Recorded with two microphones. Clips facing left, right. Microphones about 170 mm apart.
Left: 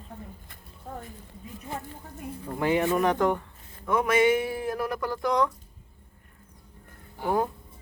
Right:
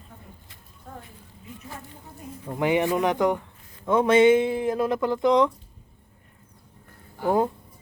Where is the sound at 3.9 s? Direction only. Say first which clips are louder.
Right 5 dB; 25° right (ahead or behind).